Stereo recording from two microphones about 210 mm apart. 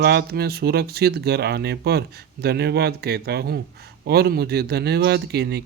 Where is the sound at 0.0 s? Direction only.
50° right (ahead or behind).